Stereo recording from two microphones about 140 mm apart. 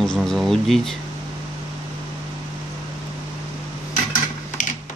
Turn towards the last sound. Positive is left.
turn(degrees=65)  # may be behind; listen again after turning